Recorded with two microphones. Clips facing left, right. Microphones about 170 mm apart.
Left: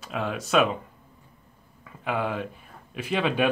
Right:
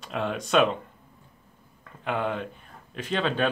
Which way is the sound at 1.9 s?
5° left (ahead or behind).